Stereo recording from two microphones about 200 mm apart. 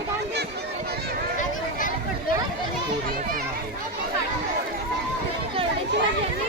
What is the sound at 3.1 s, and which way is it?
Children playing, 45° right (ahead or behind).